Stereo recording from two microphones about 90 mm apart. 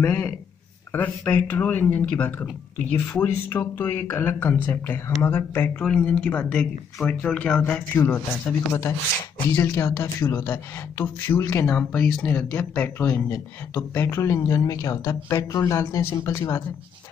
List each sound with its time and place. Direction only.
0.0 s speech: 20° left (ahead or behind)
5.8 s speech: 15° left (ahead or behind)
8.0 s speech: 25° left (ahead or behind)